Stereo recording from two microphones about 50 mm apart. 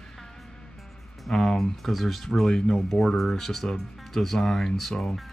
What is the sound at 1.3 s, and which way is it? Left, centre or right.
Speech, centre.